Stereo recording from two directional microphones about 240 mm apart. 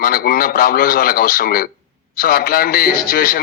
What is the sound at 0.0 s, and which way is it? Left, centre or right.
A man's voice, left.